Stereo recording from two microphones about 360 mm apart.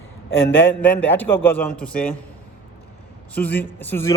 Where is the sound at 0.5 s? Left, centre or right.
Centre.